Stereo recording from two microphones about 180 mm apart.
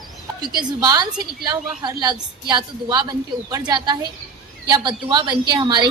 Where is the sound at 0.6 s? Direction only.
20° right (ahead or behind).